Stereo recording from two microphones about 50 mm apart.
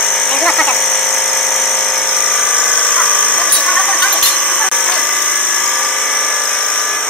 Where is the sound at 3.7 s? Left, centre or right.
Centre.